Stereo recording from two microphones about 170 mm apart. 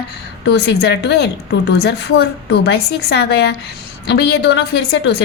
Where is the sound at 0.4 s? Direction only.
85° left.